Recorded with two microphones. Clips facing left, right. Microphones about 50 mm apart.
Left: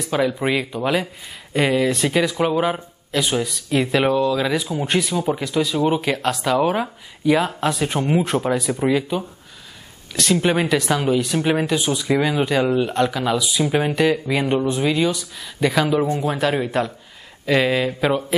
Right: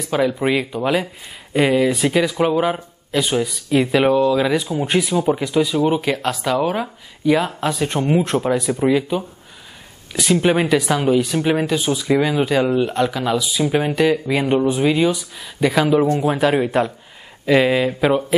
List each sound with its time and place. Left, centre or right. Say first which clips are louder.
0.0 s a man's voice: right 2 dB; centre